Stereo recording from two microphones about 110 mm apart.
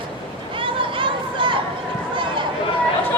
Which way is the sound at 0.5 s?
50° right (ahead or behind).